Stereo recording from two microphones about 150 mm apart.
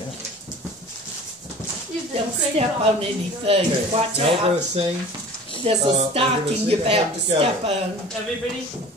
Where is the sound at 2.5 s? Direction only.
40° right (ahead or behind).